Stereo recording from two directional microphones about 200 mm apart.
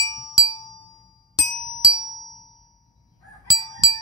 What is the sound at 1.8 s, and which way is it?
Music, 15° left (ahead or behind).